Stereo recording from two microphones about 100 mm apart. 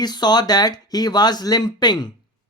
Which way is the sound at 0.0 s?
45° left (ahead or behind).